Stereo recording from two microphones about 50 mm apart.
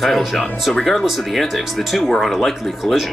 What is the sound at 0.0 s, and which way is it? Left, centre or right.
Speech, centre.